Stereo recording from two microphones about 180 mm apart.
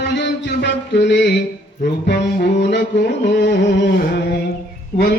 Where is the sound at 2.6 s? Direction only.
75° left (ahead or behind).